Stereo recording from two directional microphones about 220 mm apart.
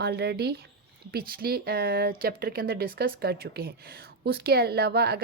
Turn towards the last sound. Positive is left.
turn(degrees=-45)  # may be behind; listen again after turning